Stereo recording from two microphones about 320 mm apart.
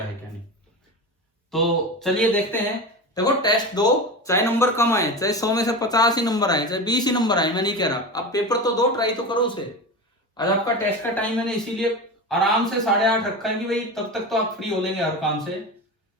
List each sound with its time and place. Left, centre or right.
1.5 s a man's voice: centre